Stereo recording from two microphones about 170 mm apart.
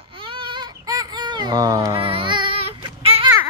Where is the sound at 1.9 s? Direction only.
30° right (ahead or behind).